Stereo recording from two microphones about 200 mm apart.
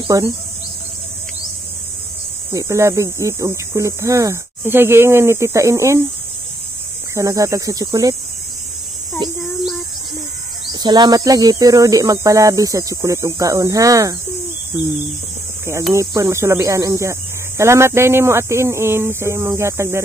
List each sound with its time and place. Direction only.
0.1 s speech: 15° right (ahead or behind)
2.5 s speech: 15° right (ahead or behind)
7.2 s speech: 15° right (ahead or behind)
9.2 s a sound: 20° right (ahead or behind)
10.7 s speech: 20° right (ahead or behind)
15.6 s speech: 15° right (ahead or behind)